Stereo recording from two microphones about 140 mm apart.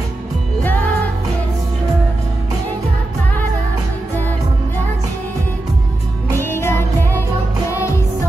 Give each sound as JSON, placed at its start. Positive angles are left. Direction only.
{"t": 6.4, "sound": "music", "side_deg": 15}